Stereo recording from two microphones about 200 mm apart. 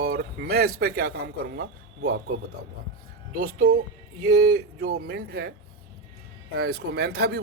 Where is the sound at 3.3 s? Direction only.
45° right (ahead or behind).